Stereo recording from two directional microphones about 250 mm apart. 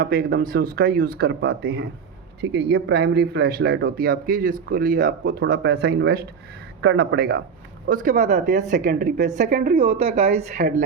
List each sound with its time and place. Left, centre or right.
0.0 s a woman's voice: right